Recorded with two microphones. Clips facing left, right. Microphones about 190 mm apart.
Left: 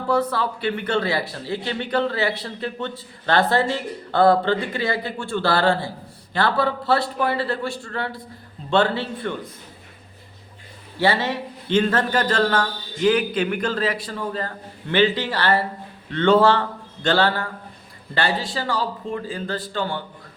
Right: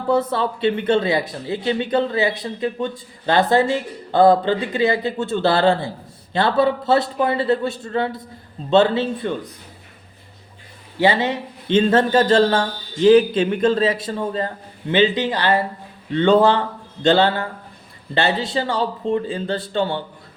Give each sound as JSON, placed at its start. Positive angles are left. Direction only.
{"t": 0.1, "sound": "speech", "side_deg": -20}
{"t": 11.0, "sound": "speech", "side_deg": -20}